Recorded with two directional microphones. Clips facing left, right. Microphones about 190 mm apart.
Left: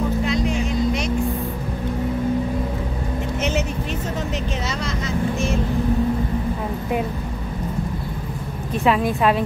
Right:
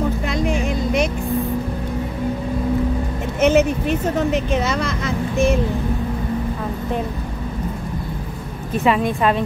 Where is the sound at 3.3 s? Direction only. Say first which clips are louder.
Right 10 dB; 55° right (ahead or behind).